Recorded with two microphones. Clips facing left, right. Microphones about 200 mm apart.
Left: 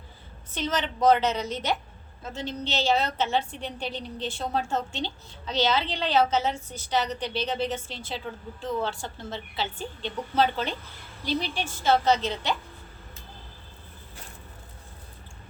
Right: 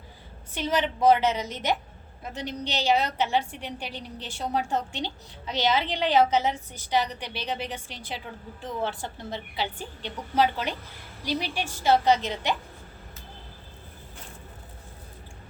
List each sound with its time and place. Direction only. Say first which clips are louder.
0.5 s a woman's voice: right 2 dB; 10° right (ahead or behind)